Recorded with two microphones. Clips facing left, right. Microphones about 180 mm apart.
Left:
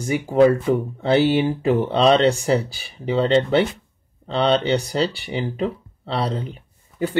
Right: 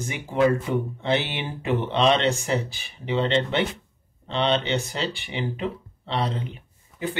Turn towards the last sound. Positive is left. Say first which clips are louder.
# left 11 dB
turn(degrees=40)  # may be behind; listen again after turning